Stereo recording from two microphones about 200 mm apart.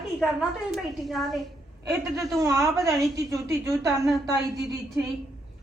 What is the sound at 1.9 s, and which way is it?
A woman's voice, 15° right (ahead or behind).